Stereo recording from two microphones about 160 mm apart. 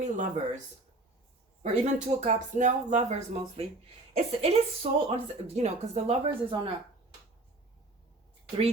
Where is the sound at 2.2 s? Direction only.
50° right (ahead or behind).